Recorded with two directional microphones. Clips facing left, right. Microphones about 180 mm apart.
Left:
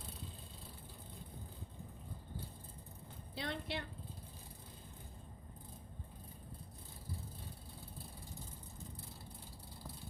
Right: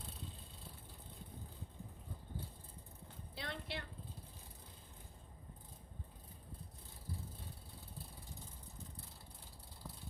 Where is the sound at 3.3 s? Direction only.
20° left (ahead or behind).